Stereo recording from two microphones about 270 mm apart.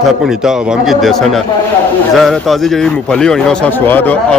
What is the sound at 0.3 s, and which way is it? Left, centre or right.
A man's voice, centre.